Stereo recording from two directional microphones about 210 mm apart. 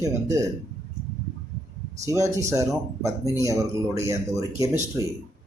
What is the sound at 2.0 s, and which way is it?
Speech, 15° right (ahead or behind).